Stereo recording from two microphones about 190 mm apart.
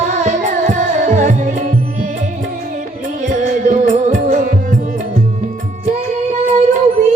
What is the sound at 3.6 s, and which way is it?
Music, 45° right (ahead or behind).